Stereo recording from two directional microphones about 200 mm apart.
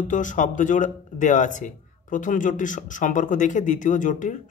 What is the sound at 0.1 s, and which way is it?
A man's voice, 40° left (ahead or behind).